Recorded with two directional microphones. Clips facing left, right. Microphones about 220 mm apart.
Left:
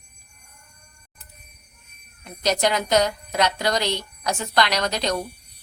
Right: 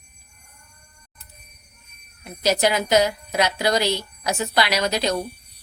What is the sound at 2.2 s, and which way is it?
A woman's voice, 5° right (ahead or behind).